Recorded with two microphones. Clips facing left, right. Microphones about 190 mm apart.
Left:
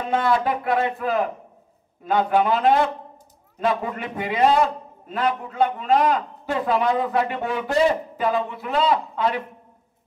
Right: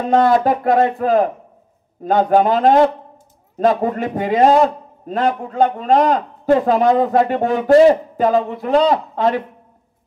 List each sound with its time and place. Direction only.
0.0 s a man's voice: 40° right (ahead or behind)